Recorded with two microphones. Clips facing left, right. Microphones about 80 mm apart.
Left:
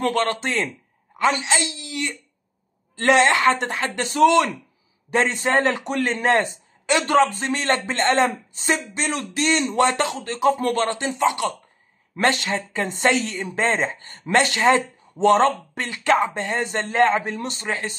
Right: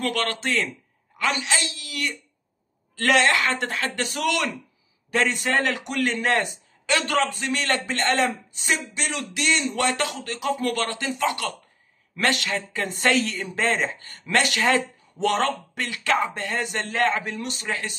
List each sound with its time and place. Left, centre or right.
0.0 s a man's voice: left